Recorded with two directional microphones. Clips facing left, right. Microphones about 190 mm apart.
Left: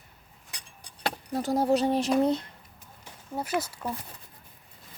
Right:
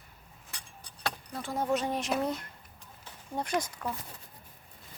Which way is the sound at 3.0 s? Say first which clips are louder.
Left 1 dB; 5° left (ahead or behind).